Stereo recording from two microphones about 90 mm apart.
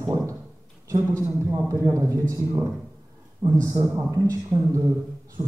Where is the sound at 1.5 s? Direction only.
35° right (ahead or behind).